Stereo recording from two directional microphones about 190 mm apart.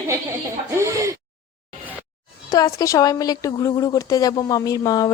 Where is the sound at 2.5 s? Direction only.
20° left (ahead or behind).